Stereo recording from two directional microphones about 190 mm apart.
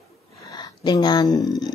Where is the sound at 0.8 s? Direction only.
20° left (ahead or behind).